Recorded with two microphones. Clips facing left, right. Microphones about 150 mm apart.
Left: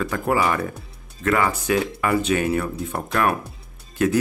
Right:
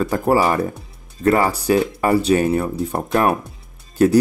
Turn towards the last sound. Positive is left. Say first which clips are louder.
# right 6 dB
turn(degrees=-35)  # may be behind; listen again after turning